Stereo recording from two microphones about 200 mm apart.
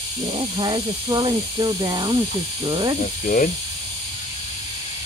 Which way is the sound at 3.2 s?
40° left (ahead or behind).